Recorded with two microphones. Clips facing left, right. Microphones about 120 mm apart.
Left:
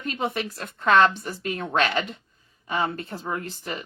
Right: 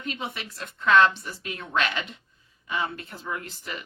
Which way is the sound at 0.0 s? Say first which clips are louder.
Left 6 dB; 45° left (ahead or behind).